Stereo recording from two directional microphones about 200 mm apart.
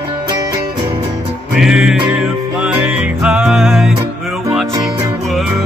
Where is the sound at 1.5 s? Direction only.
5° right (ahead or behind).